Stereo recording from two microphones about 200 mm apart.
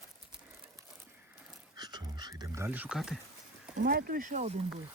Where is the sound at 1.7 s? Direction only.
20° right (ahead or behind); by 3.2 s centre (ahead or behind).